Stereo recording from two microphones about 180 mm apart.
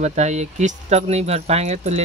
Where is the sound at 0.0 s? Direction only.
40° right (ahead or behind).